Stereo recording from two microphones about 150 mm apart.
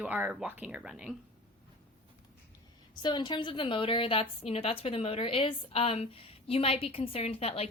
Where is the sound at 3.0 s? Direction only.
30° left (ahead or behind).